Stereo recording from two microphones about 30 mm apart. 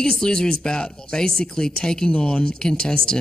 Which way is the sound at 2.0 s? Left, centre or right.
Left.